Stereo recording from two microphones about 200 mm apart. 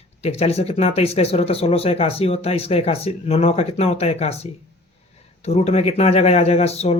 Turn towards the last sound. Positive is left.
turn(degrees=30)  # may be behind; listen again after turning